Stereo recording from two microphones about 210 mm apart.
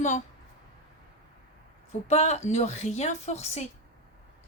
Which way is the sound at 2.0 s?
30° left (ahead or behind).